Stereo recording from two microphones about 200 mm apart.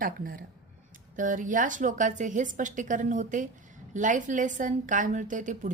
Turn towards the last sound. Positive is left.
turn(degrees=-40)  # may be behind; listen again after turning